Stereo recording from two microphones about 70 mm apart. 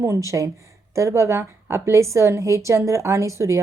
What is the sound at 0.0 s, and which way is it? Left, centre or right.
Speech, right.